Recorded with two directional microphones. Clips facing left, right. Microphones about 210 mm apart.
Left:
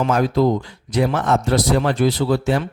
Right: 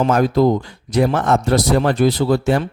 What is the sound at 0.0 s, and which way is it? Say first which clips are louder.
Speech: right 3 dB; 45° right (ahead or behind).